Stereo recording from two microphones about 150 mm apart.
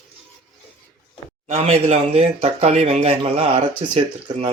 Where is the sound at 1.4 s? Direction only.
45° right (ahead or behind).